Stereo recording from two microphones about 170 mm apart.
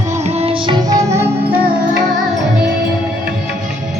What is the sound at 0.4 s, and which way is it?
Music, 25° right (ahead or behind).